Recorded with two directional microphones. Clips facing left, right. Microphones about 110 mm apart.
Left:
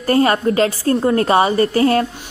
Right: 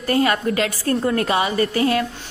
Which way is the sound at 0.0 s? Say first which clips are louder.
Left 4 dB; 40° left (ahead or behind).